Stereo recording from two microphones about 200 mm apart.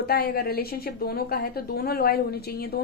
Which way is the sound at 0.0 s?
50° left (ahead or behind).